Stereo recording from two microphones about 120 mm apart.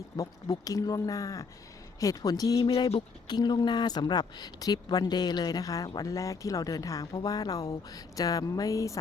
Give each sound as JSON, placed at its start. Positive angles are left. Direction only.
{"t": 0.6, "sound": "a woman's voice", "side_deg": 30}